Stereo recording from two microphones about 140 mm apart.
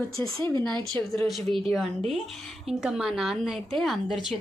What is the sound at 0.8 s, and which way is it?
Speech, 40° right (ahead or behind).